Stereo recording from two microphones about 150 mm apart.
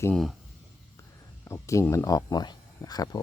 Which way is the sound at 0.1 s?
Centre (ahead or behind).